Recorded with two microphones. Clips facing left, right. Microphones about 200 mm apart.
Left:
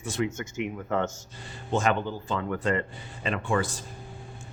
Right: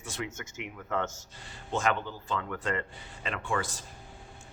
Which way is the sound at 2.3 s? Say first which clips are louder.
Left 5 dB; 25° left (ahead or behind).